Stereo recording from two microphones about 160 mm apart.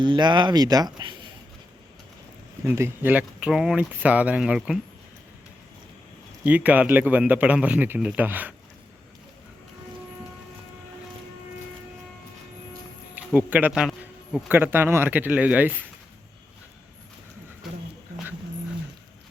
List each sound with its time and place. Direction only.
0.0 s speech: 30° right (ahead or behind)
2.6 s speech: 15° right (ahead or behind)
6.4 s speech: 10° right (ahead or behind)
13.1 s speech: 10° right (ahead or behind)